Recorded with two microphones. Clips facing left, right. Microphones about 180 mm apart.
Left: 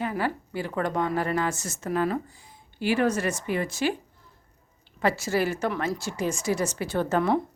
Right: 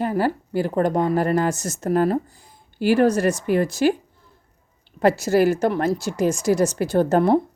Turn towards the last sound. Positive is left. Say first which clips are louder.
# right 7 dB
turn(degrees=-40)  # may be behind; listen again after turning